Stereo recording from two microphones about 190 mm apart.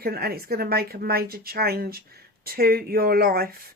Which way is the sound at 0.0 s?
55° right (ahead or behind).